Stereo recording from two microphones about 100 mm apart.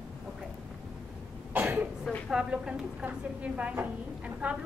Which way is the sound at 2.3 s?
5° right (ahead or behind).